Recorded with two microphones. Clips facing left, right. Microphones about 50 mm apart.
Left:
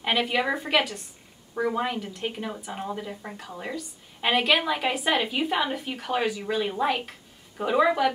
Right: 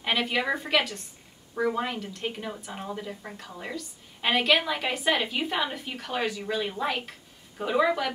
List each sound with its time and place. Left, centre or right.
0.0 s a woman's voice: centre